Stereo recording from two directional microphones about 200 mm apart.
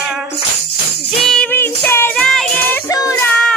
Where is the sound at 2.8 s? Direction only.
15° left (ahead or behind).